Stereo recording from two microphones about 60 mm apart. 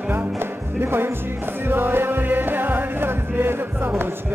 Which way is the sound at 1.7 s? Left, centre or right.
Right.